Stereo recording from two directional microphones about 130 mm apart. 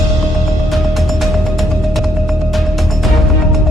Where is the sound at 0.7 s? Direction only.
Centre (ahead or behind).